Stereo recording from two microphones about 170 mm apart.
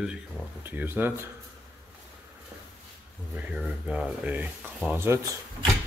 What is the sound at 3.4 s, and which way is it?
Speech, 5° right (ahead or behind).